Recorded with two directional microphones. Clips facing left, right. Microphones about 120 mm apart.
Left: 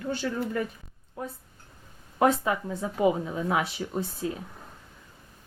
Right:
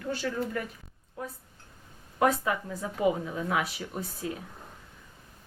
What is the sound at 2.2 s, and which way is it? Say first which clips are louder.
Speech: left 2 dB; 25° left (ahead or behind).